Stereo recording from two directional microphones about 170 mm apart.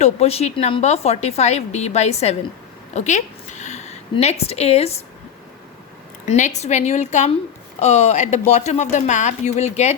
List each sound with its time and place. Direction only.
0.0 s a woman's voice: 40° left (ahead or behind)
6.2 s a woman's voice: 45° left (ahead or behind)